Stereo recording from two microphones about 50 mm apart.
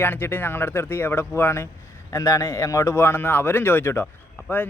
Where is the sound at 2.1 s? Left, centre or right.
Left.